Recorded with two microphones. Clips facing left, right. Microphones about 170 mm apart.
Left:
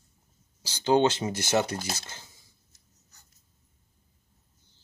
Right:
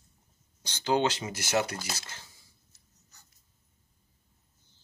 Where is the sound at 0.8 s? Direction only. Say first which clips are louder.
Left 5 dB; 25° left (ahead or behind).